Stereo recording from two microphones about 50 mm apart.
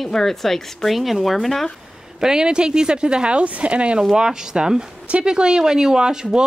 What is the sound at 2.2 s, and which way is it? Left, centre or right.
Speech, centre.